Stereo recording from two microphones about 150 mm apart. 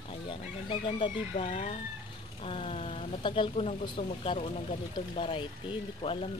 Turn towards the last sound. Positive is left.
turn(degrees=35)  # may be behind; listen again after turning